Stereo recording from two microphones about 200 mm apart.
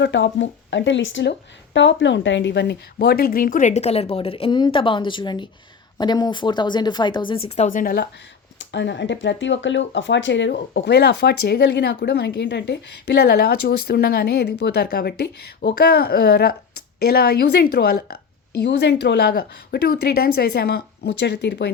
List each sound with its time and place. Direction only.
0.0 s speech: 65° left (ahead or behind); by 8.0 s 45° left (ahead or behind)
8.5 s speech: 60° left (ahead or behind)